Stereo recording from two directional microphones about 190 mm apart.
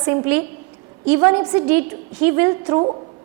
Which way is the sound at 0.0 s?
10° right (ahead or behind).